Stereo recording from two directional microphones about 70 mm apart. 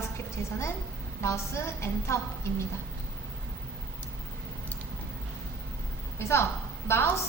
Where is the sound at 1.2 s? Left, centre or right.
Left.